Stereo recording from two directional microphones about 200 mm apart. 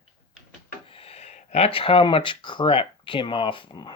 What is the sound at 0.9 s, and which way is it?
Speech, 30° left (ahead or behind).